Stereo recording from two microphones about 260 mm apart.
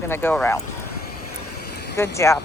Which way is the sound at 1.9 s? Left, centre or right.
Centre.